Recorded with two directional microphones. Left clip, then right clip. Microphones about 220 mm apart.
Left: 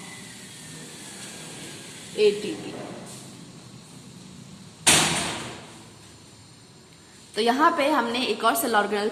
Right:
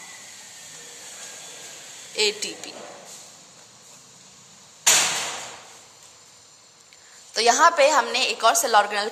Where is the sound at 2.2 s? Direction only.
55° right (ahead or behind).